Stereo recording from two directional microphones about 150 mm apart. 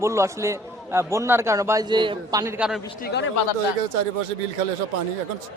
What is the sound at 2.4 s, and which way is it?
Speech, 20° right (ahead or behind).